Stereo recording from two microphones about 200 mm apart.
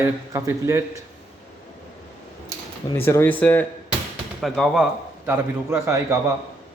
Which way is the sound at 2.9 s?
10° left (ahead or behind).